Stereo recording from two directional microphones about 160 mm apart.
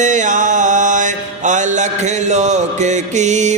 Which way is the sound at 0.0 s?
50° right (ahead or behind).